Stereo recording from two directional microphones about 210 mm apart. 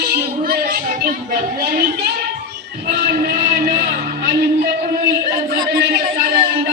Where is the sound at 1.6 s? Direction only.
45° right (ahead or behind).